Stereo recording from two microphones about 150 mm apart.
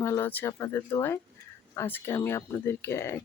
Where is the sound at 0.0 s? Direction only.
15° left (ahead or behind).